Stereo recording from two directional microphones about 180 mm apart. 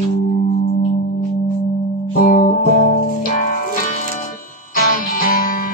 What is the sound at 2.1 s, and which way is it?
Music, 50° left (ahead or behind).